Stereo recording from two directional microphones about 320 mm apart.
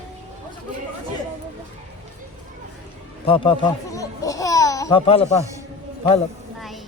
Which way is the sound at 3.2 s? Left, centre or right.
Centre.